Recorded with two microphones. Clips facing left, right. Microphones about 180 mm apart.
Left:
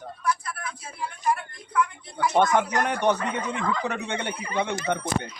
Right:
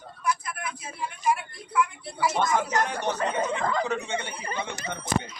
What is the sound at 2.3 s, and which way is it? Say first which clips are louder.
Speech: left 5 dB; 60° left (ahead or behind).